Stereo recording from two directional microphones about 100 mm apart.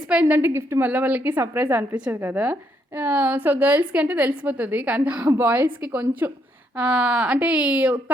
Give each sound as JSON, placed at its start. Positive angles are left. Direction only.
{"t": 0.1, "sound": "a woman's voice", "side_deg": -15}